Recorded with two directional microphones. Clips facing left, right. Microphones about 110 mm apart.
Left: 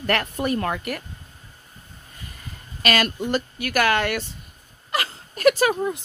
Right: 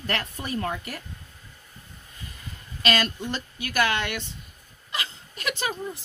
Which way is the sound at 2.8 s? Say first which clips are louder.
Left 3 dB; 60° left (ahead or behind).